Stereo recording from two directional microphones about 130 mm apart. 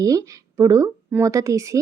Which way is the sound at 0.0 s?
25° right (ahead or behind).